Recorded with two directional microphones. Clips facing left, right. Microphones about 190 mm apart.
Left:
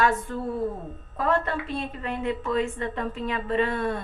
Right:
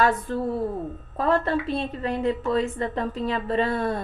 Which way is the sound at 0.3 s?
35° right (ahead or behind).